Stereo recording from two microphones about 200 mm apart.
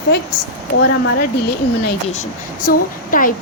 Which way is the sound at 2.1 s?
40° left (ahead or behind).